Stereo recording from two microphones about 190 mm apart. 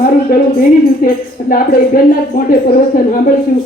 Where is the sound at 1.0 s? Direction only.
45° left (ahead or behind).